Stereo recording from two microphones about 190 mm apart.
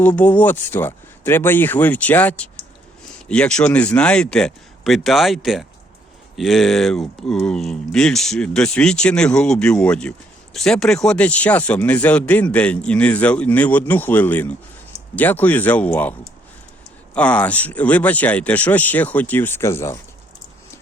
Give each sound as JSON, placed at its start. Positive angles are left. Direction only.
{"t": 0.2, "sound": "speech", "side_deg": 10}
{"t": 17.2, "sound": "speech", "side_deg": 5}